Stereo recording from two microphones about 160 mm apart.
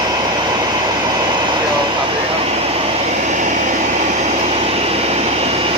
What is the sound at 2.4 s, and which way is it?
Vehicle, 40° right (ahead or behind).